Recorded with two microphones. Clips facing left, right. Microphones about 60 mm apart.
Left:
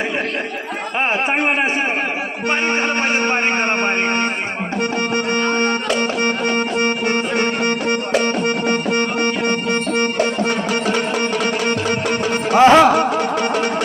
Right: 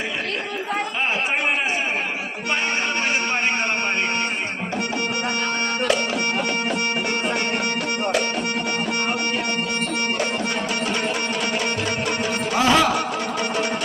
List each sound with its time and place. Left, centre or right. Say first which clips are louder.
4.8 s music: left 6 dB; left
11.9 s music: left 5 dB; left